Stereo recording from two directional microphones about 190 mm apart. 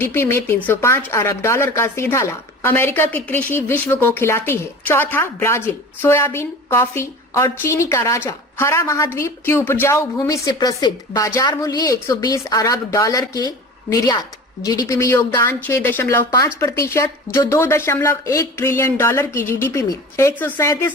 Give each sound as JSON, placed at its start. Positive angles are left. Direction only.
{"t": 0.0, "sound": "speech", "side_deg": 10}